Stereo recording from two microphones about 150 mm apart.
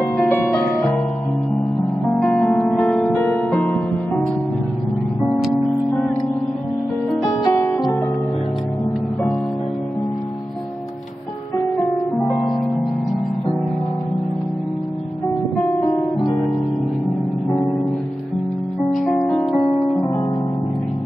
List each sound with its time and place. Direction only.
0.3 s harp: 15° left (ahead or behind)
2.1 s music: 5° left (ahead or behind)
7.1 s music: centre (ahead or behind)
7.4 s music: 20° left (ahead or behind)
7.7 s music: 10° left (ahead or behind)
15.8 s music: 30° left (ahead or behind)
18.9 s music: centre (ahead or behind)